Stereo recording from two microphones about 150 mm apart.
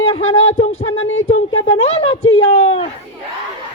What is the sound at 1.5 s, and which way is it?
Speech, 35° left (ahead or behind).